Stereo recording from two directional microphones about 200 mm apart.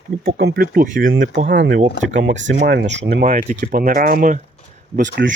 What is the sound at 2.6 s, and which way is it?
Speech, 55° right (ahead or behind).